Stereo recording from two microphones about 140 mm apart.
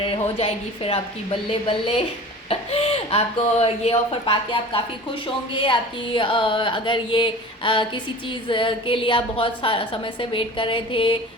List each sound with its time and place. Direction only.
0.0 s a woman's voice: 40° left (ahead or behind)
6.1 s a woman's voice: 35° left (ahead or behind)